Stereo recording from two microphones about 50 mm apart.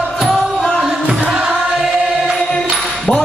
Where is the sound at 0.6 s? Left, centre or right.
Centre.